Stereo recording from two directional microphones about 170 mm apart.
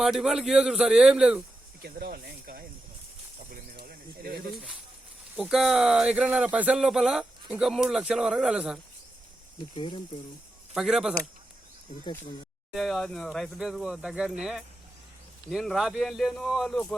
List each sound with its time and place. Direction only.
0.0 s speech: centre (ahead or behind)
1.8 s speech: 65° right (ahead or behind)
3.5 s snake: 60° right (ahead or behind)
5.4 s speech: centre (ahead or behind)
9.7 s speech: 30° left (ahead or behind)
10.8 s speech: 5° right (ahead or behind)
12.7 s speech: centre (ahead or behind)